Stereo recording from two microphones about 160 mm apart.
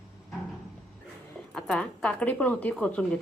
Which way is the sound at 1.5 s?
5° left (ahead or behind).